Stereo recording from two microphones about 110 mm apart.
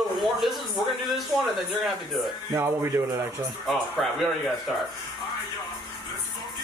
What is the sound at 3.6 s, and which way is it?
Speech, centre (ahead or behind).